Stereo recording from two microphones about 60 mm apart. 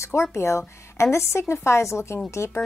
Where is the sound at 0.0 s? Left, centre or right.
Left.